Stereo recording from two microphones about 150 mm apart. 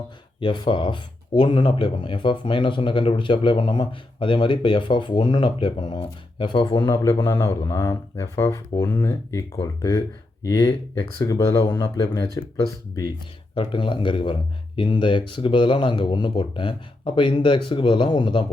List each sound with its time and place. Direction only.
0.3 s speech: 35° left (ahead or behind)
11.2 s speech: 20° left (ahead or behind)
13.6 s speech: 35° left (ahead or behind)